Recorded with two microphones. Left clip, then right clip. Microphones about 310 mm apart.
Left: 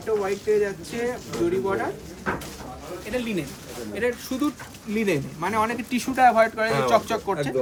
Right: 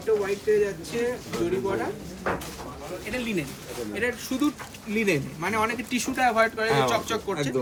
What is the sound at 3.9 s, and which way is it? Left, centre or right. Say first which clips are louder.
A man's voice: left 3 dB; centre.